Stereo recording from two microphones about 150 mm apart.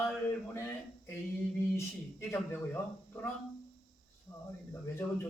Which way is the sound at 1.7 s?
15° left (ahead or behind).